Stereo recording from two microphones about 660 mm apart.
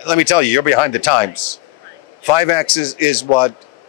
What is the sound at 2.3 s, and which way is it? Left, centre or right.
Speech, left.